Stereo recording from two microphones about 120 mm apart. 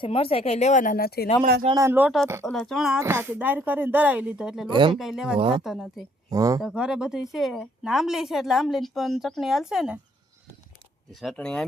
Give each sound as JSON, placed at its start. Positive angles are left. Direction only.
{"t": 0.0, "sound": "speech", "side_deg": 55}
{"t": 1.7, "sound": "speech", "side_deg": -25}
{"t": 2.0, "sound": "speech", "side_deg": -5}
{"t": 3.0, "sound": "speech", "side_deg": -20}
{"t": 4.7, "sound": "speech", "side_deg": -40}
{"t": 4.9, "sound": "speech", "side_deg": -5}
{"t": 5.4, "sound": "speech", "side_deg": -45}
{"t": 5.6, "sound": "speech", "side_deg": 0}
{"t": 6.3, "sound": "speech", "side_deg": -30}
{"t": 6.6, "sound": "speech", "side_deg": -5}
{"t": 11.1, "sound": "speech", "side_deg": 0}